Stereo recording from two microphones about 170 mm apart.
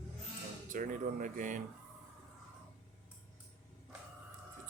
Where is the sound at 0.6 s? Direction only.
50° right (ahead or behind).